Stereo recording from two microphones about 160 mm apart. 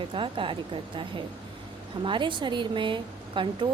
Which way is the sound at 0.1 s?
35° right (ahead or behind).